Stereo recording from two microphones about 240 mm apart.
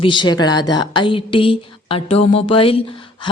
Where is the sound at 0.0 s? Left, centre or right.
Centre.